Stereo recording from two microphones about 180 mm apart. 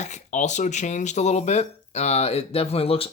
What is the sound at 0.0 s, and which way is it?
Speech, 40° left (ahead or behind).